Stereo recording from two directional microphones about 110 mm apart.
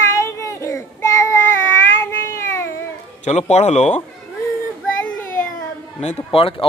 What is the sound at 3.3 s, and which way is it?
Speech, 85° left.